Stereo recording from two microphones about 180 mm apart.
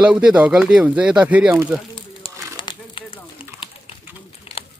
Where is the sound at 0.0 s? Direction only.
5° right (ahead or behind).